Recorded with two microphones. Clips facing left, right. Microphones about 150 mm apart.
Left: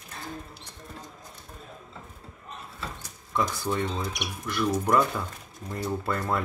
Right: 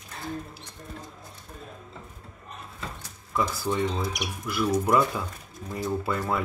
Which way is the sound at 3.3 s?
Centre (ahead or behind).